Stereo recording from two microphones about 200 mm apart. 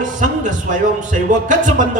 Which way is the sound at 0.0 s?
40° right (ahead or behind).